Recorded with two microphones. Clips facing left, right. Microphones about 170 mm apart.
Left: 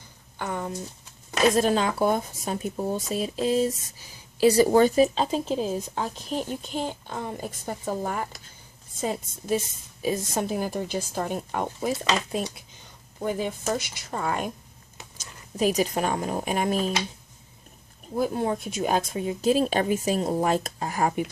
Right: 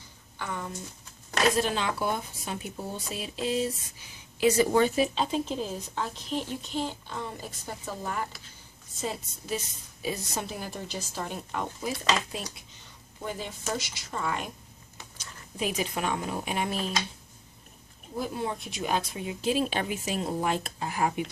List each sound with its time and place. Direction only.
0.4 s speech: 45° left (ahead or behind)
18.2 s speech: 50° left (ahead or behind)